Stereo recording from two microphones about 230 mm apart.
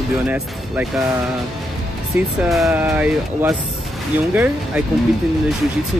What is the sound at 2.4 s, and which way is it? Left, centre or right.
Speech, centre.